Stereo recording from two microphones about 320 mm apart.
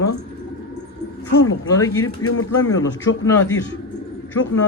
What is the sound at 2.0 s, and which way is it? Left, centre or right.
Speech, left.